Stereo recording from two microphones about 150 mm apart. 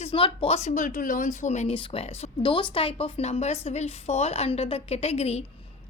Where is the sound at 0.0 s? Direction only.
35° left (ahead or behind); by 1.7 s 50° left (ahead or behind).